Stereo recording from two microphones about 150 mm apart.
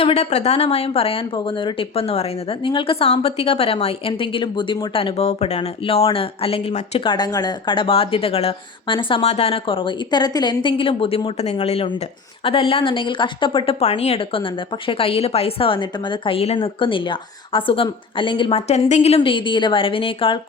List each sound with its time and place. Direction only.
0.0 s speech: 45° left (ahead or behind)
7.1 s speech: 30° left (ahead or behind)